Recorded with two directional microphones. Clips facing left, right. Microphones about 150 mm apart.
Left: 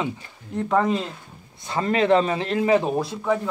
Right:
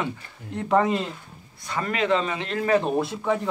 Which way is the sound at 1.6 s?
30° left (ahead or behind).